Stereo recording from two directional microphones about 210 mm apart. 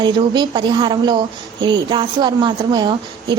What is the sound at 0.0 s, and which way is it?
A woman's voice, 20° right (ahead or behind).